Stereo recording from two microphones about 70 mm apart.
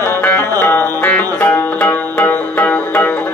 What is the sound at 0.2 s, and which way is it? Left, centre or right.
Music, left.